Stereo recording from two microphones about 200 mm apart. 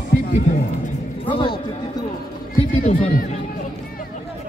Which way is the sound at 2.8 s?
35° left (ahead or behind).